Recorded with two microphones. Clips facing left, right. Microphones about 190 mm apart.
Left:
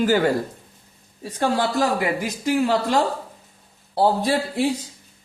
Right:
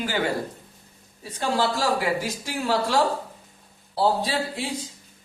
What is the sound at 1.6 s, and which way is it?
A man's voice, 55° left (ahead or behind).